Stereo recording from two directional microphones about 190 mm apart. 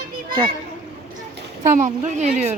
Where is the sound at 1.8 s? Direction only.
40° right (ahead or behind).